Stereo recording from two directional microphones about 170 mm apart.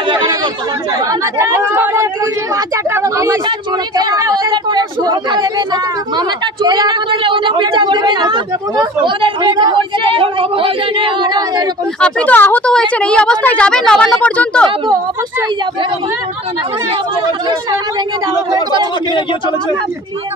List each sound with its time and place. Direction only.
1.0 s speech: 15° right (ahead or behind)
12.0 s speech: 10° left (ahead or behind)
18.5 s speech: 25° right (ahead or behind)